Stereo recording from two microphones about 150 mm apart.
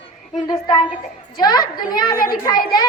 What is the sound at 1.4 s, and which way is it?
A woman's voice, 25° left (ahead or behind).